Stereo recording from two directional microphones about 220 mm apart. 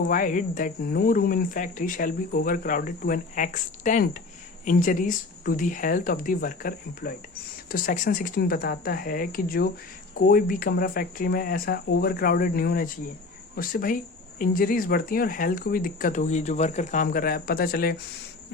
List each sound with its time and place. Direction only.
0.0 s speech: 35° left (ahead or behind)